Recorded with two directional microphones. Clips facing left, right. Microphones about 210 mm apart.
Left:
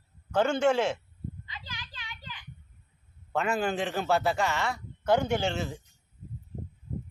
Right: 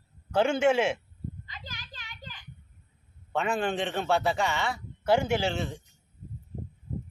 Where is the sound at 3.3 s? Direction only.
Centre (ahead or behind).